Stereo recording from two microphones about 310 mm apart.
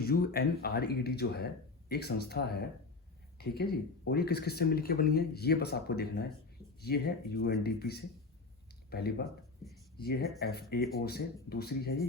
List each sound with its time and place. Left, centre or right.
0.0 s speech: left